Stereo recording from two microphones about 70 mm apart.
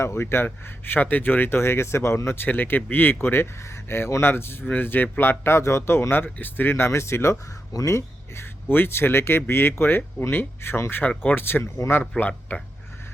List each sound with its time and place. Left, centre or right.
0.0 s speech: left
7.7 s speech: left
12.1 s speech: centre
12.5 s speech: left